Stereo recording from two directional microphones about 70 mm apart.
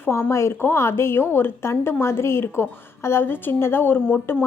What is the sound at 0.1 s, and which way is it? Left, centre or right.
A woman's voice, left.